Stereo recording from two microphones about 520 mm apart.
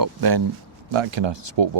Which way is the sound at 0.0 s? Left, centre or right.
Right.